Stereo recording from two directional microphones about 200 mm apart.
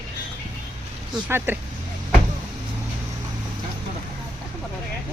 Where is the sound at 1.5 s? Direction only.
10° right (ahead or behind).